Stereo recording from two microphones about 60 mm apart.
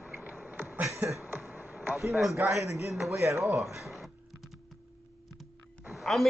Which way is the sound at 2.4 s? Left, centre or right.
Right.